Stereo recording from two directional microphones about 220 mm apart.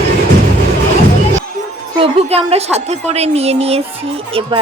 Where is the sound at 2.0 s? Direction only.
25° right (ahead or behind).